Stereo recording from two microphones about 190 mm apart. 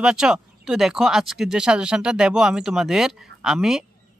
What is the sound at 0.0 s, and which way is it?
Speech, 5° right (ahead or behind).